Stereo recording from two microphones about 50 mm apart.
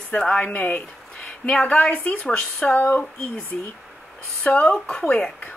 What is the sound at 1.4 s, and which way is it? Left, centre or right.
Speech, left.